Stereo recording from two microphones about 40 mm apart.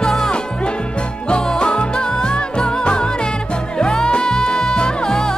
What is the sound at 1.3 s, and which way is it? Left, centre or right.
Music, left.